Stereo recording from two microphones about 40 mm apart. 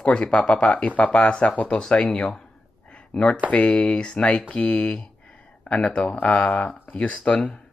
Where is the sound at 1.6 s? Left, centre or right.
Centre.